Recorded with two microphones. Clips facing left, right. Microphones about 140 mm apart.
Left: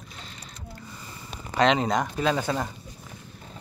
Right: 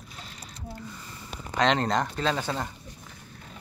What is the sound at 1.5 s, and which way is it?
Speech, 5° left (ahead or behind).